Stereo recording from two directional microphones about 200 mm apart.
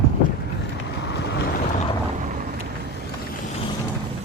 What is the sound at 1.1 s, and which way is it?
Boat, 55° left (ahead or behind).